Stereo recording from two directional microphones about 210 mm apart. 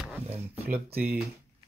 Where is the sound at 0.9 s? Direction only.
10° right (ahead or behind).